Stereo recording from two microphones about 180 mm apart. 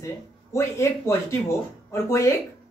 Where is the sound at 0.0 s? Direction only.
15° left (ahead or behind).